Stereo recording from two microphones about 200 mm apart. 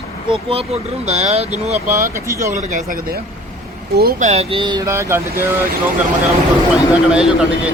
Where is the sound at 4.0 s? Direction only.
50° right (ahead or behind).